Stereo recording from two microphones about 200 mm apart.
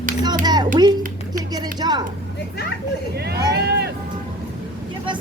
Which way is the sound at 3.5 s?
55° right (ahead or behind).